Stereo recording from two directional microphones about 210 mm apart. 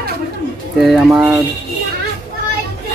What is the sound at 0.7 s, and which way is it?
Speech, centre (ahead or behind).